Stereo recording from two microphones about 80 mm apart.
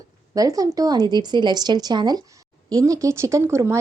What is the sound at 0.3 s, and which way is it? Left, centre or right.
A woman's voice, right.